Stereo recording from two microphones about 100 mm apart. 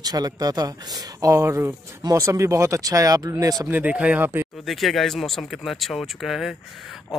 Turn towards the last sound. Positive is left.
turn(degrees=-5)  # may be behind; listen again after turning